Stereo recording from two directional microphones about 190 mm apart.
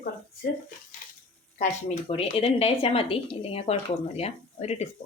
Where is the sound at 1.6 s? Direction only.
35° left (ahead or behind).